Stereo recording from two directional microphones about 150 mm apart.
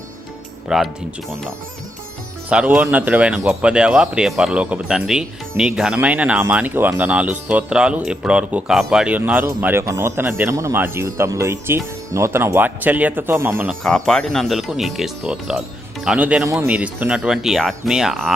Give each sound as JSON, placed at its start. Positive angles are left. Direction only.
{"t": 0.7, "sound": "speech", "side_deg": -5}
{"t": 2.5, "sound": "a man's voice", "side_deg": -10}
{"t": 13.8, "sound": "a man's voice", "side_deg": 5}